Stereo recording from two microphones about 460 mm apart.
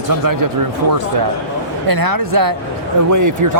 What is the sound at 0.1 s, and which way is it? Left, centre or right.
Speech, right.